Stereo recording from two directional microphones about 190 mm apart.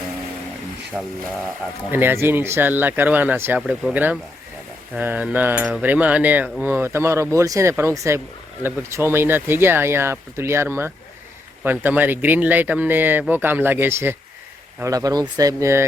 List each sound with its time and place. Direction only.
0.9 s speech: 5° right (ahead or behind)